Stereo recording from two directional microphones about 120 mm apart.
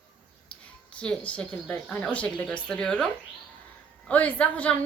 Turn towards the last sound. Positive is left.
turn(degrees=10)  # may be behind; listen again after turning